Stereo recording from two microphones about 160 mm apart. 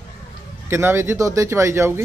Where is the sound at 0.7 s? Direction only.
15° right (ahead or behind).